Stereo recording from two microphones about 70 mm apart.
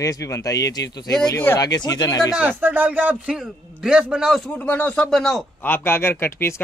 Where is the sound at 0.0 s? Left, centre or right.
Left.